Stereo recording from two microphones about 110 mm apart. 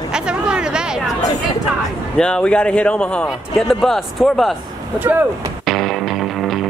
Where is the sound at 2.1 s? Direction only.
10° left (ahead or behind).